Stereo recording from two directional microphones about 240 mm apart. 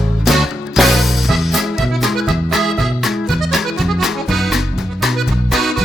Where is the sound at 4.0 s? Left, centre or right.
Centre.